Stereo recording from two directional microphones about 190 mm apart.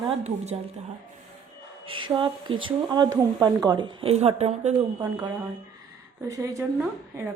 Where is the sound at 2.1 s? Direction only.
25° right (ahead or behind).